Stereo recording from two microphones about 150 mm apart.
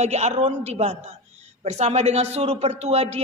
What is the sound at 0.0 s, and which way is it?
A woman's voice, 45° right (ahead or behind).